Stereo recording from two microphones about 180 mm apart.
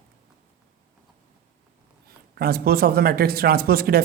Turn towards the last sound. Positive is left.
turn(degrees=-55)  # may be behind; listen again after turning